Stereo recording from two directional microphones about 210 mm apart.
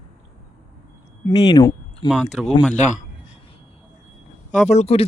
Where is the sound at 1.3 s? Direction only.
25° left (ahead or behind).